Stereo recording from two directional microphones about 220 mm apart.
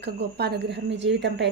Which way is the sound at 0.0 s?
45° right (ahead or behind).